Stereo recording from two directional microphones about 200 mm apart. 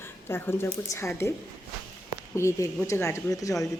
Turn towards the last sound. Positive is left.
turn(degrees=15)  # may be behind; listen again after turning